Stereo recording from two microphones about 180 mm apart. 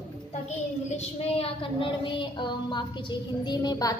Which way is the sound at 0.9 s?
30° left (ahead or behind).